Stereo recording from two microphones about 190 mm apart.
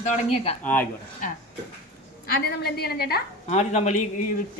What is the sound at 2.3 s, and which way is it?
Speech, 55° left (ahead or behind).